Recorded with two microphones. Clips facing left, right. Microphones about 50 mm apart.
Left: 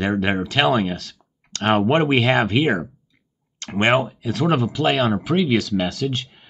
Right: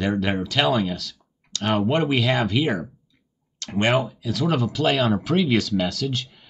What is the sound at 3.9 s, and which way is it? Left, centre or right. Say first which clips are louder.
Speech: left 3 dB; left.